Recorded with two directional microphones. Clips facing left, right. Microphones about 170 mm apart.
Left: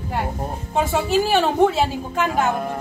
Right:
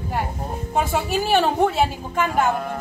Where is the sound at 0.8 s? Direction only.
Centre (ahead or behind).